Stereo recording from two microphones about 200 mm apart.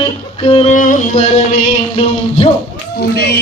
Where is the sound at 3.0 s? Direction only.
50° left (ahead or behind).